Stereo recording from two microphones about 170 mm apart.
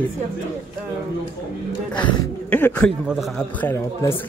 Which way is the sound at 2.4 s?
10° left (ahead or behind).